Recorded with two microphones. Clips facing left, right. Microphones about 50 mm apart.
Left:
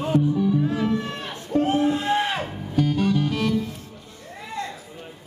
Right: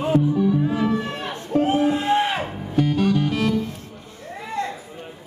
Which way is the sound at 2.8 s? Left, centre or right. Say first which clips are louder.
Right 2 dB; right.